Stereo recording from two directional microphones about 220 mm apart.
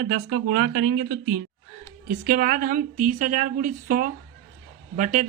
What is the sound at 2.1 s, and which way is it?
A man's voice, 40° right (ahead or behind).